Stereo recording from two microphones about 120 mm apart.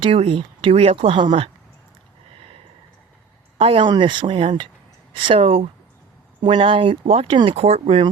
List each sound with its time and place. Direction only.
0.0 s speech: 50° right (ahead or behind)
3.6 s speech: 45° right (ahead or behind)